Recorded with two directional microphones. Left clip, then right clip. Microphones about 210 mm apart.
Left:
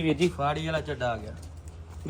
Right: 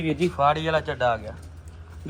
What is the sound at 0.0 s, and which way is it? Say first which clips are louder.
Speech: right 4 dB; centre (ahead or behind).